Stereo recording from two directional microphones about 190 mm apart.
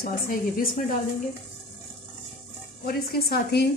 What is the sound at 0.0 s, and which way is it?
Speech, 50° left (ahead or behind).